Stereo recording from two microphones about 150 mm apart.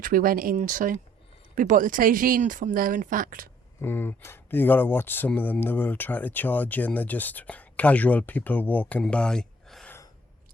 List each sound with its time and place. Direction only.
0.0 s speech: 70° right (ahead or behind)
0.5 s speech: 60° right (ahead or behind)
3.8 s speech: 15° left (ahead or behind)